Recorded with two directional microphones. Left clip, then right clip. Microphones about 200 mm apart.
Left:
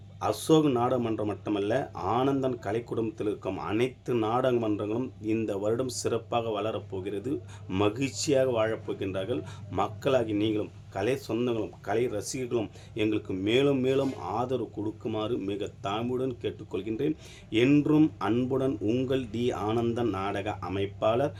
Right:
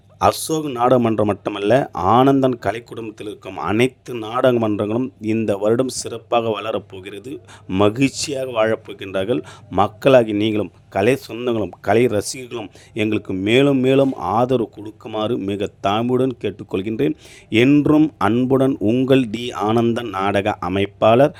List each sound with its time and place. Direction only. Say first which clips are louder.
0.2 s speech: right 14 dB; 45° right (ahead or behind)
0.9 s a man's voice: right 13 dB; 35° right (ahead or behind)
4.5 s a man's voice: right 9 dB; 25° right (ahead or behind)
17.8 s speech: right 9 dB; 25° right (ahead or behind)
19.0 s a man's voice: right 12 dB; 40° right (ahead or behind)